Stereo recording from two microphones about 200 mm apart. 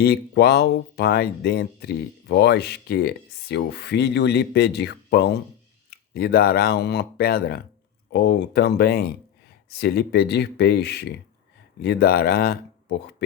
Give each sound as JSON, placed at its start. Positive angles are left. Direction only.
{"t": 0.0, "sound": "speech", "side_deg": 55}